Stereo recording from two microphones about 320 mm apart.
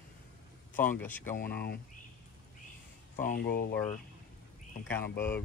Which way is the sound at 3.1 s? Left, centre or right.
Left.